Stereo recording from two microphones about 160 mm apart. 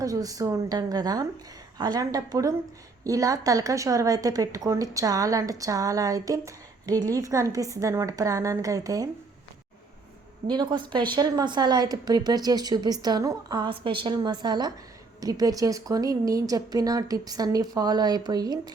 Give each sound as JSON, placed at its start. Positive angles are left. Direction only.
{"t": 0.0, "sound": "a woman's voice", "side_deg": -20}
{"t": 10.4, "sound": "a woman's voice", "side_deg": -25}